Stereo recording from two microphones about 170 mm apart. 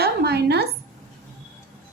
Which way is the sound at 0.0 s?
70° right (ahead or behind).